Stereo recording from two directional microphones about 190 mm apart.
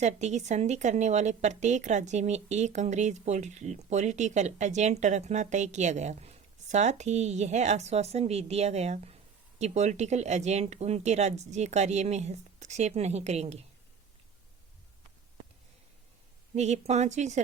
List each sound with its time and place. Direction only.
0.0 s speech: 35° right (ahead or behind)
16.6 s speech: 35° right (ahead or behind)